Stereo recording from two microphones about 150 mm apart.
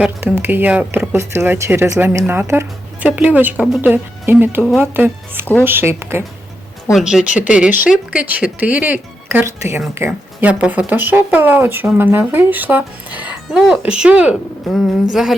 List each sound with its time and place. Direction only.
0.2 s speech: 15° right (ahead or behind)
6.9 s speech: 5° right (ahead or behind)